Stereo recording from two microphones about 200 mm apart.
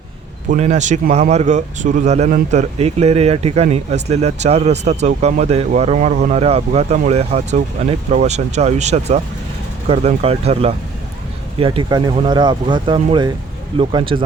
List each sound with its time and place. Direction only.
0.5 s speech: 35° right (ahead or behind)